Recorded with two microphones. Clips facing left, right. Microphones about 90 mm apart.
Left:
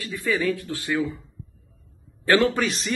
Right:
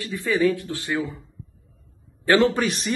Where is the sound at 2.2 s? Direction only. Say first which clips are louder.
Right 1 dB; 25° right (ahead or behind).